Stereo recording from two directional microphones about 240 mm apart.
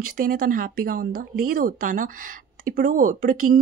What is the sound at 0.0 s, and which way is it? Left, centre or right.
Speech, right.